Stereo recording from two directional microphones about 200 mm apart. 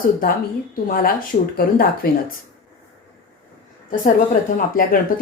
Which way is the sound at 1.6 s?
45° left (ahead or behind).